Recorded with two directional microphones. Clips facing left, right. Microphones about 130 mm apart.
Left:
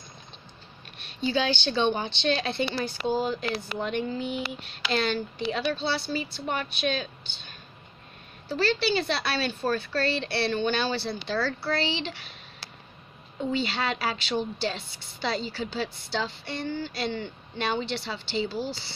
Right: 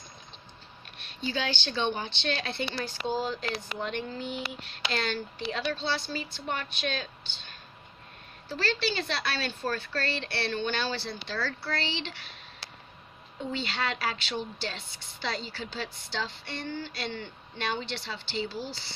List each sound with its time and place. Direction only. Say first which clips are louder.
0.9 s a woman's voice: left 6 dB; 15° left (ahead or behind)
2.6 s speech: left 5 dB; 10° left (ahead or behind)
11.3 s a woman's voice: left 5 dB; 30° left (ahead or behind)
11.7 s speech: left 5 dB; 10° left (ahead or behind)
13.5 s speech: left 4 dB; 15° left (ahead or behind)